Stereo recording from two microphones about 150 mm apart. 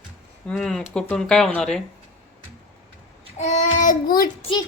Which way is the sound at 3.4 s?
50° left (ahead or behind).